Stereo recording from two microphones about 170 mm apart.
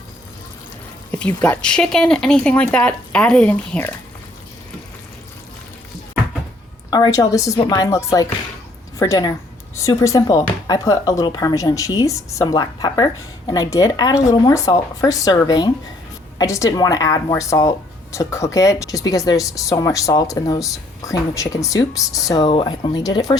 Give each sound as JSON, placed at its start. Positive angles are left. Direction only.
{"t": 1.4, "sound": "speech", "side_deg": 5}
{"t": 6.9, "sound": "speech", "side_deg": 20}